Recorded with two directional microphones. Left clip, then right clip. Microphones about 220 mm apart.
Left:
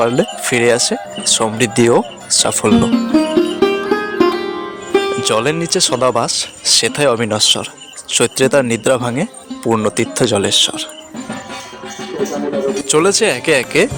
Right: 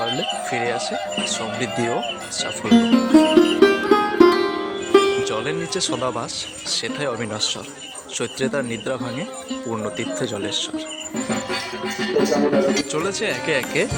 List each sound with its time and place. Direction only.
0.0 s speech: 50° left (ahead or behind)
2.8 s music: centre (ahead or behind)
5.2 s speech: 45° left (ahead or behind)
12.7 s speech: 50° left (ahead or behind)